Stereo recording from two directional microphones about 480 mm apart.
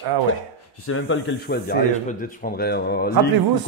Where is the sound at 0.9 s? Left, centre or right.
Left.